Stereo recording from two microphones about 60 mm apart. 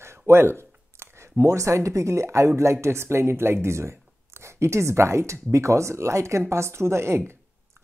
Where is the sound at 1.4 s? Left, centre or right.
Right.